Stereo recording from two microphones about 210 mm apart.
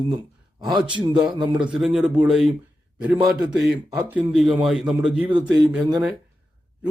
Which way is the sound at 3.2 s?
20° right (ahead or behind).